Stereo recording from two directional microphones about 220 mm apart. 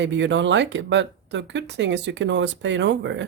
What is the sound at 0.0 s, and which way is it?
Speech, 55° right (ahead or behind).